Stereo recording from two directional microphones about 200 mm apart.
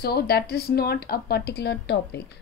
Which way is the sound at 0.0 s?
50° left (ahead or behind).